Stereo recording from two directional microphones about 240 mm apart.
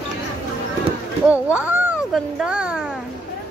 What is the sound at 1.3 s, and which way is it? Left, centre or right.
Speech, centre.